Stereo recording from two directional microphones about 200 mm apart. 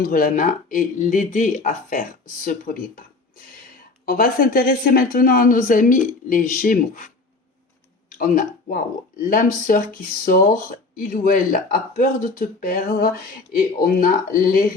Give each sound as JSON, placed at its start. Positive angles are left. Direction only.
{"t": 0.0, "sound": "speech", "side_deg": 45}
{"t": 4.0, "sound": "speech", "side_deg": 45}
{"t": 8.1, "sound": "speech", "side_deg": 45}